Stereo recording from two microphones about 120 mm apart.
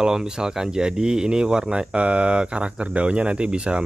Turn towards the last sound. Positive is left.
turn(degrees=-10)  # may be behind; listen again after turning